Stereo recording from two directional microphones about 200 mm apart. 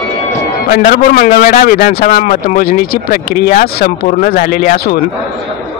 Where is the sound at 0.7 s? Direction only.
45° left (ahead or behind).